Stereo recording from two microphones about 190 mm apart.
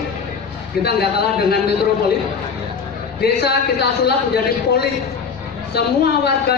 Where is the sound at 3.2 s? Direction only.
55° left (ahead or behind).